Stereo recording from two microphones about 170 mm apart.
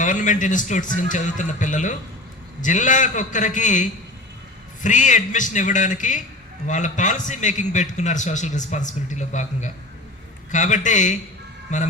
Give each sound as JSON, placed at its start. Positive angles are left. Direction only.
{"t": 0.0, "sound": "a man's voice", "side_deg": 50}